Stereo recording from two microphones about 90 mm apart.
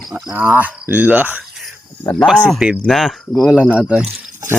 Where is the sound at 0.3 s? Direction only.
20° right (ahead or behind).